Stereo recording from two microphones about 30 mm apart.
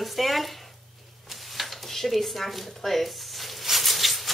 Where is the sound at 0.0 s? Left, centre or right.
Centre.